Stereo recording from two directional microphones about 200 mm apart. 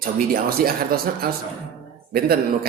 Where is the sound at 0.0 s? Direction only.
45° right (ahead or behind).